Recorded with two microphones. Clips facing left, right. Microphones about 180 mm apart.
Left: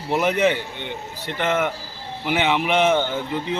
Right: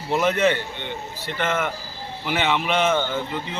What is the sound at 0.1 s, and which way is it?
A man's voice, 15° left (ahead or behind).